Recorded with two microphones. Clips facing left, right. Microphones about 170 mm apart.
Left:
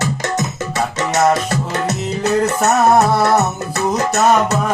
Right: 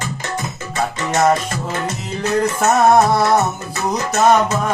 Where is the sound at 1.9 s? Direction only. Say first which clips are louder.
Left 4 dB; 70° left (ahead or behind).